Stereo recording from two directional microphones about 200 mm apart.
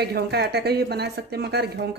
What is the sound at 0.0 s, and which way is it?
A woman's voice, 55° right (ahead or behind).